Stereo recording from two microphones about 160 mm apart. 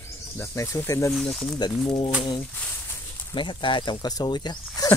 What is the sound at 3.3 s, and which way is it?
Speech, 30° left (ahead or behind).